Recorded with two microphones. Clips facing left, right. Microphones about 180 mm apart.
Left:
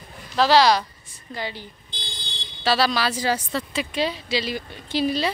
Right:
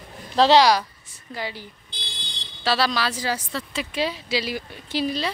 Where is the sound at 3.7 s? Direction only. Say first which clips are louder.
Even; 5° right (ahead or behind).